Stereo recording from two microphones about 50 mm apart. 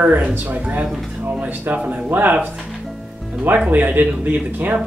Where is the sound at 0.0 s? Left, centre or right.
Right.